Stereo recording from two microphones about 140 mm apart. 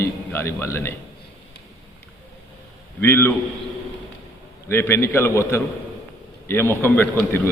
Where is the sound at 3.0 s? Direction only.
15° left (ahead or behind).